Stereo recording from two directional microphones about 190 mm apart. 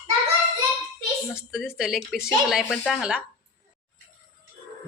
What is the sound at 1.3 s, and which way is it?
Speech, centre (ahead or behind).